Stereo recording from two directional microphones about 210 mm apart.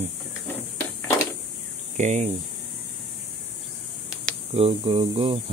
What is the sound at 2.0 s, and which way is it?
Speech, 35° right (ahead or behind).